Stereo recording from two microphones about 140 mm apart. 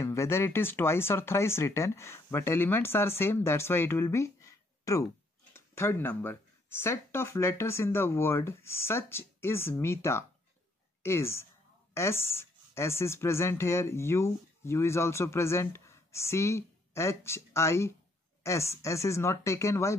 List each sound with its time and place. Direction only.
0.0 s a woman's voice: 20° left (ahead or behind)